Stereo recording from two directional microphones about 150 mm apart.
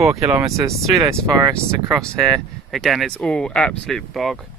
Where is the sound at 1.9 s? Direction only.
Centre (ahead or behind).